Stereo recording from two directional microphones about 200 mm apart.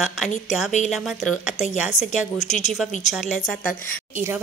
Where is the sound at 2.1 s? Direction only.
35° left (ahead or behind).